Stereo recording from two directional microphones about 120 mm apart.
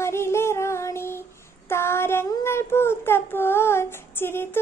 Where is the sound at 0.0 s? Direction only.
20° left (ahead or behind).